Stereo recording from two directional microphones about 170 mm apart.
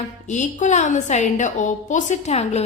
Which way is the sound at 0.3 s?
45° left (ahead or behind).